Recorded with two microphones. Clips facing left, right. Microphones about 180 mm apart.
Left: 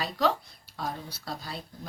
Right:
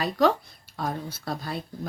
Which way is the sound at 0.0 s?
50° right (ahead or behind).